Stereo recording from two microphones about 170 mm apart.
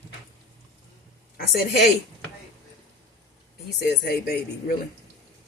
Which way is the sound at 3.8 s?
70° left (ahead or behind).